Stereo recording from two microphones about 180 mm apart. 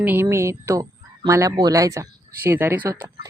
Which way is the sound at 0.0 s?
10° right (ahead or behind).